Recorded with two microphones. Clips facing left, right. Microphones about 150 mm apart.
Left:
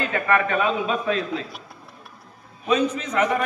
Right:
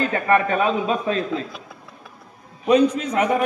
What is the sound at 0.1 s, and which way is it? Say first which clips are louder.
A man's voice: right 3 dB; 30° right (ahead or behind).